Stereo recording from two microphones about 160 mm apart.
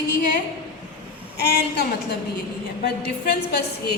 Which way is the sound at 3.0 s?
85° left.